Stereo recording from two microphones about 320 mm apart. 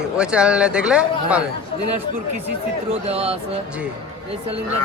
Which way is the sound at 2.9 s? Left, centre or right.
Centre.